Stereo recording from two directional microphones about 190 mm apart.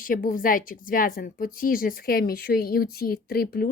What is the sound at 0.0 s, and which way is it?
A woman's voice, 45° left (ahead or behind).